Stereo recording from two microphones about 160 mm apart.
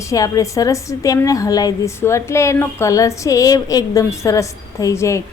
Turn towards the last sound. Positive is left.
turn(degrees=20)  # may be behind; listen again after turning